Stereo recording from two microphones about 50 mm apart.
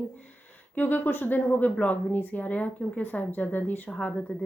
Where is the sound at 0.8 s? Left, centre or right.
Left.